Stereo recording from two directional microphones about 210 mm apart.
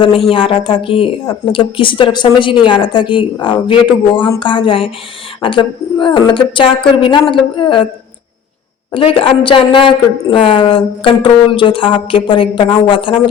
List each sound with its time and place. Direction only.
0.0 s a woman's voice: 25° left (ahead or behind)
8.9 s a woman's voice: 25° left (ahead or behind)